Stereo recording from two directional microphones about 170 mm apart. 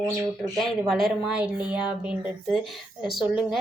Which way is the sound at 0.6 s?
Centre (ahead or behind).